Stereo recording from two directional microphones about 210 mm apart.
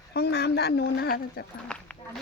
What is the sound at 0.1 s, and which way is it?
Speech, 50° left (ahead or behind).